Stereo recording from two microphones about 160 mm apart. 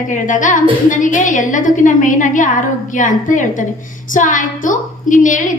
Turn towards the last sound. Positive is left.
turn(degrees=55)  # may be behind; listen again after turning